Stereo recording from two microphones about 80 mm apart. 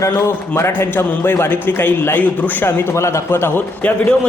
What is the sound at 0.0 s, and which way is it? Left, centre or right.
A man's voice, left.